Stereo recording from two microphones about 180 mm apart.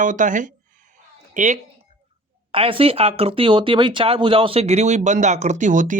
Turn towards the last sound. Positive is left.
turn(degrees=-45)  # may be behind; listen again after turning